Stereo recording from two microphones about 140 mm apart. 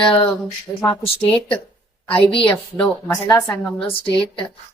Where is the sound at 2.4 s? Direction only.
10° left (ahead or behind).